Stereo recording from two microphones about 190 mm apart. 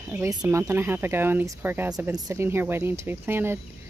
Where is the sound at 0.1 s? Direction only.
15° right (ahead or behind).